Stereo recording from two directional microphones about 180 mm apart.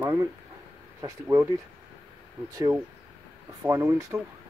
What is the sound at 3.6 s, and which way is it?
Speech, 15° right (ahead or behind).